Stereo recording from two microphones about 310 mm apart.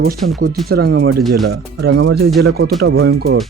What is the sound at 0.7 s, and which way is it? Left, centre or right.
Speech, right.